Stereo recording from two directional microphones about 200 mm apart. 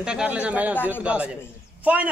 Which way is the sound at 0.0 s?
5° right (ahead or behind).